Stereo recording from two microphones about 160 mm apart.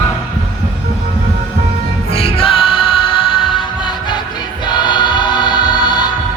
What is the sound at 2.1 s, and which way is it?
Music, 35° left (ahead or behind).